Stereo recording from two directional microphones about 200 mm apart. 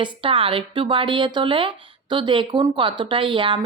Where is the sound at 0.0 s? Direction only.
25° right (ahead or behind).